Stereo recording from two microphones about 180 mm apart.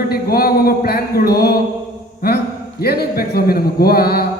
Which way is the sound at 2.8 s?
60° left (ahead or behind).